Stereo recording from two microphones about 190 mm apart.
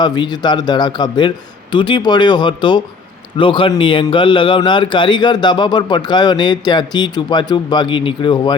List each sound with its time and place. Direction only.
0.0 s speech: 25° left (ahead or behind)